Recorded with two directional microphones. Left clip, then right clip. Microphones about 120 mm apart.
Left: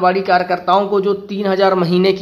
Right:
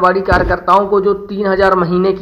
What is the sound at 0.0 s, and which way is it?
A man's voice, 15° left (ahead or behind).